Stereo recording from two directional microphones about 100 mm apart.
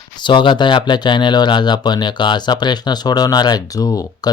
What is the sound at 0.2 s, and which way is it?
Speech, 50° left (ahead or behind).